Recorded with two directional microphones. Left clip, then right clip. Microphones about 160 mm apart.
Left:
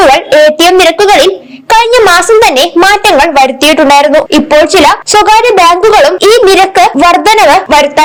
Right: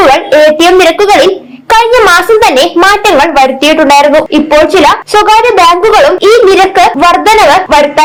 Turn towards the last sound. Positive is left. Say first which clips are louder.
# even
turn(degrees=40)  # may be behind; listen again after turning